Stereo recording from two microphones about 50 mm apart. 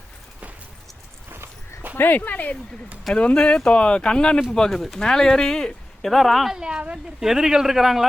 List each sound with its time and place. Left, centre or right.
1.3 s walk: right
2.0 s speech: left
3.3 s speech: centre
6.5 s a woman's voice: centre
7.2 s speech: centre